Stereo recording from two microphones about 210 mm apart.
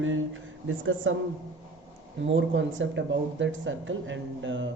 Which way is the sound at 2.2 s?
60° right (ahead or behind).